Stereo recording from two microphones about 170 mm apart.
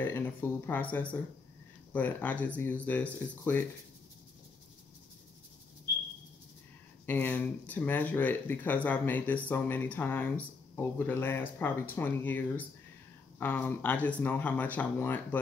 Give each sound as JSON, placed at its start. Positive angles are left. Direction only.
{"t": 0.0, "sound": "speech", "side_deg": 10}
{"t": 7.1, "sound": "speech", "side_deg": 10}